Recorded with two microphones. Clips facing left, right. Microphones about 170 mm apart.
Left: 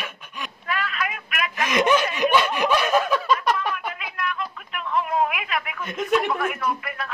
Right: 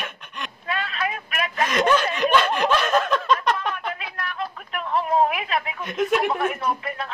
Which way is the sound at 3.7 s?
35° right (ahead or behind).